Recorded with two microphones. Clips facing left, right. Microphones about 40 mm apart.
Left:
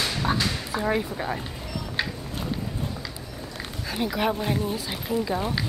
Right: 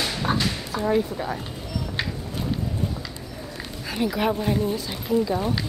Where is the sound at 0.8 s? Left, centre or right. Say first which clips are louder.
Right 4 dB; left.